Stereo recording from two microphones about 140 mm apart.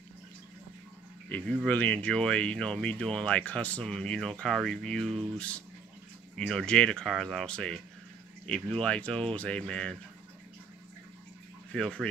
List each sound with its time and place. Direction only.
1.3 s speech: 10° left (ahead or behind)
6.3 s speech: 5° left (ahead or behind)
11.7 s speech: 5° left (ahead or behind)